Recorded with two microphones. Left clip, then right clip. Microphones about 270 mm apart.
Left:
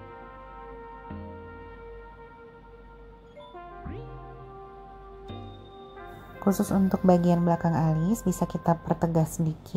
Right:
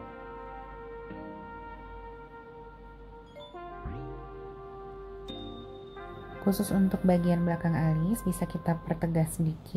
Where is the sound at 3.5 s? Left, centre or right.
Centre.